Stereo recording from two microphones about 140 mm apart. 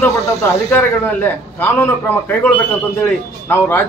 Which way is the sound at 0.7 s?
15° left (ahead or behind).